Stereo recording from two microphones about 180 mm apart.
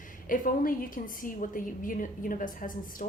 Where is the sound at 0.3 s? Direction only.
50° left (ahead or behind).